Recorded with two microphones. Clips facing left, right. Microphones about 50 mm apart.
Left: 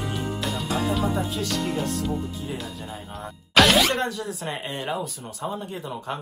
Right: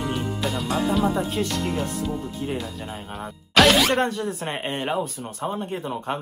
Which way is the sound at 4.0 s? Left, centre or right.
Right.